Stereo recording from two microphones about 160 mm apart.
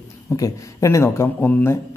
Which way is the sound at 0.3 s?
20° left (ahead or behind).